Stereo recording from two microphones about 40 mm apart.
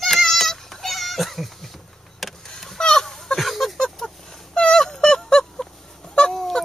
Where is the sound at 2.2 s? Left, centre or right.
Centre.